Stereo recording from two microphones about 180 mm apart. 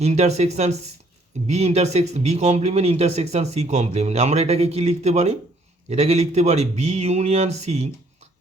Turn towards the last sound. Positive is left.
turn(degrees=-35)  # may be behind; listen again after turning